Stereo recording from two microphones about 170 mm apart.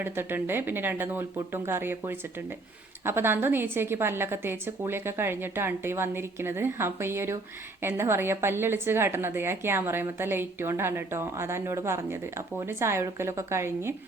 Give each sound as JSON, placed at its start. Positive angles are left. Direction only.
{"t": 0.0, "sound": "a woman's voice", "side_deg": -10}